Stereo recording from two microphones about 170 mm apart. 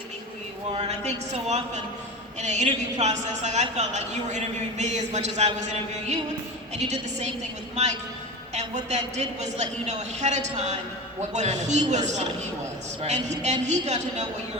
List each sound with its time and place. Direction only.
0.7 s a woman's voice: 40° right (ahead or behind)
8.5 s a woman's voice: 40° right (ahead or behind)